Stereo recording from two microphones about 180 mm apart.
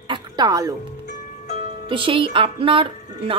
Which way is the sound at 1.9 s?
30° right (ahead or behind).